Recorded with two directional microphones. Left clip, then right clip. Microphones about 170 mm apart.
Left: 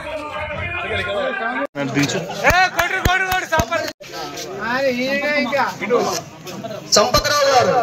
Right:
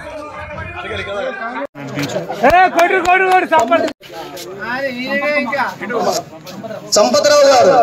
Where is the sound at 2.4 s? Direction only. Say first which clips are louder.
Right 6 dB; 60° right (ahead or behind).